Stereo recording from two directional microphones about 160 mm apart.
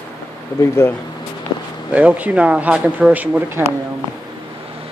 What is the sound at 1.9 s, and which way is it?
Speech, 10° right (ahead or behind).